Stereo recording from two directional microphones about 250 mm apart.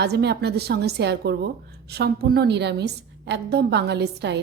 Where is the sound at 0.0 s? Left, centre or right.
Right.